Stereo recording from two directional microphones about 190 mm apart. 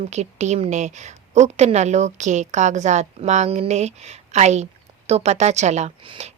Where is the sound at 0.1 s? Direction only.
35° right (ahead or behind).